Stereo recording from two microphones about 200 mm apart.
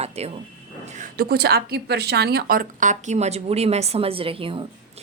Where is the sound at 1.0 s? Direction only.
45° right (ahead or behind); by 4.6 s 25° right (ahead or behind).